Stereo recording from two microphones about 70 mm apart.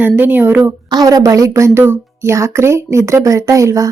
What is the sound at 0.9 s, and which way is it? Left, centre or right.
A woman's voice, right.